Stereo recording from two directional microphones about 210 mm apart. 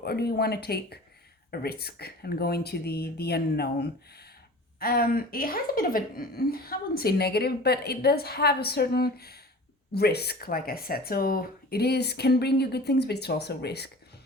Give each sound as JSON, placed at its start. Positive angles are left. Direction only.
{"t": 0.0, "sound": "a woman's voice", "side_deg": 50}